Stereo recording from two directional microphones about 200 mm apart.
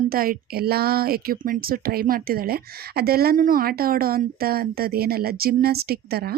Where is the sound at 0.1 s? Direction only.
45° right (ahead or behind).